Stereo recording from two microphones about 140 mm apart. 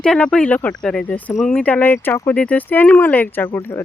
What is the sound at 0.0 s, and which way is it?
Speech, 5° left (ahead or behind).